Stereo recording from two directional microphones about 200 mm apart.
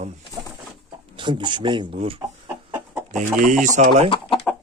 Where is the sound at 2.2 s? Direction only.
10° right (ahead or behind).